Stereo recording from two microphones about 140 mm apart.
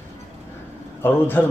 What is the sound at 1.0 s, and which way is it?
Speech, 15° left (ahead or behind).